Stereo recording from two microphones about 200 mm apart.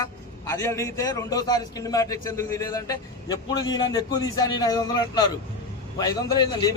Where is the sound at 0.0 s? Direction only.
15° left (ahead or behind).